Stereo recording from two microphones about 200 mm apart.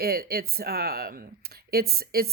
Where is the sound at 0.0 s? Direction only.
50° right (ahead or behind).